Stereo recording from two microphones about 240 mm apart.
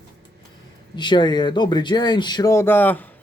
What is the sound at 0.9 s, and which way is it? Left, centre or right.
Speech, centre.